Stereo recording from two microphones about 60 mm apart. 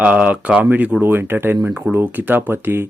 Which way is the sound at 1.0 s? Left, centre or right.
Right.